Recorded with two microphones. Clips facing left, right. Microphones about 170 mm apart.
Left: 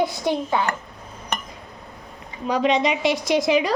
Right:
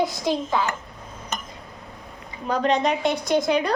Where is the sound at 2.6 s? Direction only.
90° left.